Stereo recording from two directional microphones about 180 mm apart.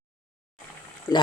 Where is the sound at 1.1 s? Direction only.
20° left (ahead or behind).